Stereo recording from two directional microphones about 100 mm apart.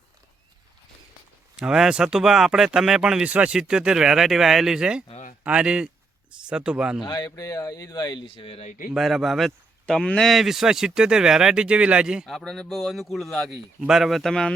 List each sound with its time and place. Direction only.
1.5 s speech: 5° right (ahead or behind)
7.0 s speech: 40° left (ahead or behind)
8.3 s speech: 70° left (ahead or behind)
8.9 s speech: centre (ahead or behind)